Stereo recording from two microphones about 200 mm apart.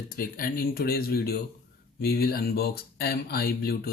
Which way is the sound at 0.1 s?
45° left (ahead or behind).